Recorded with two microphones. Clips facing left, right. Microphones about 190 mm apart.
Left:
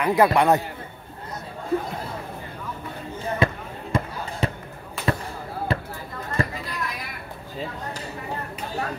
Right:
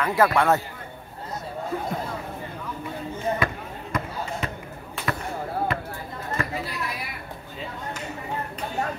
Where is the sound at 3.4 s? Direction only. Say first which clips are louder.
Left 4 dB; 25° left (ahead or behind).